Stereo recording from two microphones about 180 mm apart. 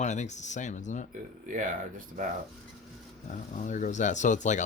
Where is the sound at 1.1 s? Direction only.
45° right (ahead or behind).